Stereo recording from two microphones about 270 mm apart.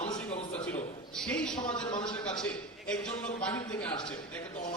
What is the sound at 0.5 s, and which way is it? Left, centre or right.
A man's voice, centre.